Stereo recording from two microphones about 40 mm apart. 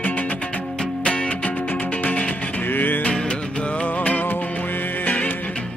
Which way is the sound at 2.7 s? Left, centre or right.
Left.